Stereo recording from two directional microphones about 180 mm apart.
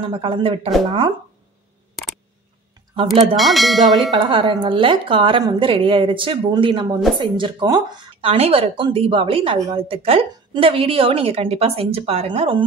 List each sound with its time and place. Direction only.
0.1 s speech: 30° right (ahead or behind)
3.3 s speech: centre (ahead or behind)
4.1 s speech: 25° right (ahead or behind)